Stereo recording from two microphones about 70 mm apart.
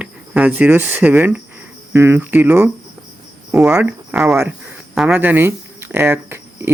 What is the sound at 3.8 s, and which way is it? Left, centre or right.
Speech, centre.